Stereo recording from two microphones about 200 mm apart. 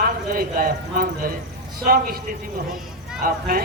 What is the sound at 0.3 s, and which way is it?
A man's voice, 45° right (ahead or behind).